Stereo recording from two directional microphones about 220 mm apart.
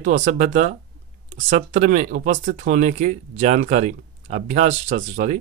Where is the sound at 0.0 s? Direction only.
35° right (ahead or behind).